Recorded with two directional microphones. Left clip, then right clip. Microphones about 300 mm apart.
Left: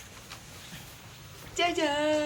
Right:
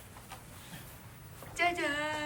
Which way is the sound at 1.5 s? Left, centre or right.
Centre.